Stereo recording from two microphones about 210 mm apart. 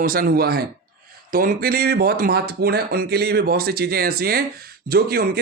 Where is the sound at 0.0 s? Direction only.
45° right (ahead or behind).